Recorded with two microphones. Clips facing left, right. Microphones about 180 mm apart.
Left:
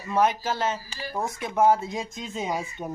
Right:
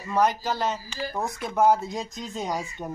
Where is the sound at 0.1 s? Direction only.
5° left (ahead or behind).